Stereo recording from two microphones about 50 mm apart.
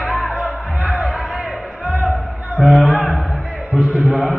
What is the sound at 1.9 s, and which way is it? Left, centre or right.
Music, centre.